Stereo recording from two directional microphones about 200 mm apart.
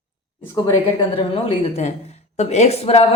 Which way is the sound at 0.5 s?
25° left (ahead or behind).